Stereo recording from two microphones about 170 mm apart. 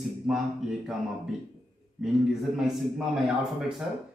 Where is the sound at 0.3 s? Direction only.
Centre (ahead or behind).